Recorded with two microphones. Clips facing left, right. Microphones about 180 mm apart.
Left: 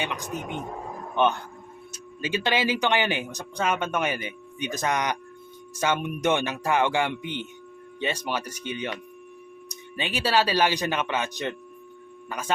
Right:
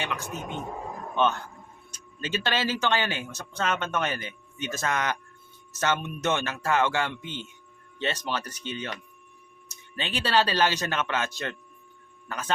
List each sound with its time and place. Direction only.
0.0 s speech: 15° left (ahead or behind)